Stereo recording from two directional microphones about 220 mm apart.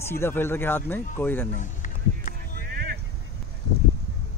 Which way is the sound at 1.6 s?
35° left (ahead or behind).